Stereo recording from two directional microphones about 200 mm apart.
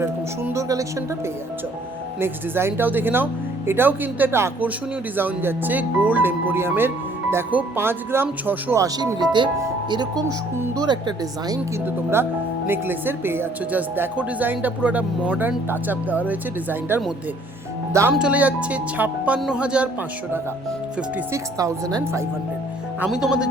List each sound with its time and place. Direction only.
0.0 s speech: 15° right (ahead or behind)
2.2 s speech: 10° right (ahead or behind)
18.1 s speech: 5° right (ahead or behind)
21.3 s speech: 15° right (ahead or behind)
23.0 s speech: 5° right (ahead or behind)